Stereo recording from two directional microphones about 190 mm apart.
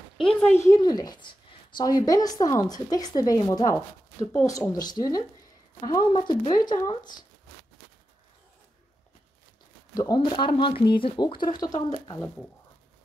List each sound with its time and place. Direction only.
0.2 s a woman's voice: 5° left (ahead or behind); by 7.2 s 20° left (ahead or behind)
9.9 s a woman's voice: 20° left (ahead or behind)